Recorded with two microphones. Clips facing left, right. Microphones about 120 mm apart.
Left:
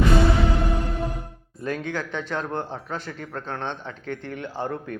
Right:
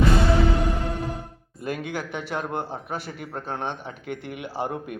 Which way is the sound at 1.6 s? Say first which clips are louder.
Left 1 dB; 10° right (ahead or behind).